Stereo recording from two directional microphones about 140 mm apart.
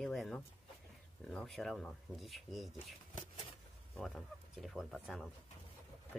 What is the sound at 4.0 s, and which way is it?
Speech, centre (ahead or behind).